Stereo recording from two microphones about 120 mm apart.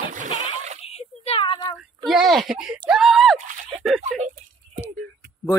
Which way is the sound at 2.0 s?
Centre (ahead or behind).